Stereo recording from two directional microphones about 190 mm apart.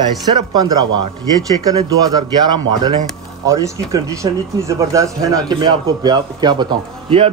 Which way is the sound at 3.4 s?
15° right (ahead or behind).